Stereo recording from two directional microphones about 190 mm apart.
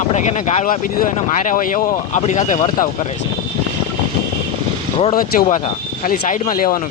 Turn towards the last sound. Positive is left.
turn(degrees=45)  # may be behind; listen again after turning